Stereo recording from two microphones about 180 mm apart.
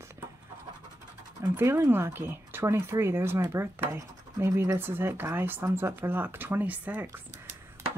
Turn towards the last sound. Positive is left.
turn(degrees=-10)  # may be behind; listen again after turning